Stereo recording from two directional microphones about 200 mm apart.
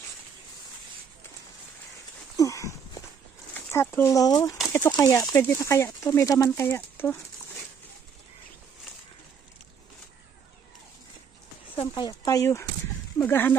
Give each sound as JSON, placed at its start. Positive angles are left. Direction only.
{"t": 2.3, "sound": "a sound", "side_deg": 15}
{"t": 3.5, "sound": "speech", "side_deg": 10}
{"t": 11.8, "sound": "speech", "side_deg": 20}